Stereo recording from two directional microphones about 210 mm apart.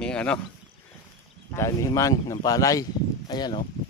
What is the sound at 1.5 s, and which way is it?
Speech, 15° left (ahead or behind).